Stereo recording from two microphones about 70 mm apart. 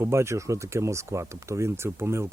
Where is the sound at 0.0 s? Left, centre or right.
Right.